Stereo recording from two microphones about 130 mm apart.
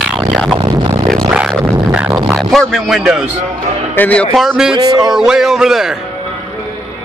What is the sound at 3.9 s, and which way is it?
Speech, 10° left (ahead or behind).